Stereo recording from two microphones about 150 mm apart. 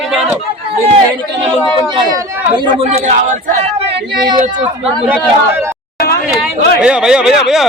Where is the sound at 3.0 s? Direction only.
55° right (ahead or behind).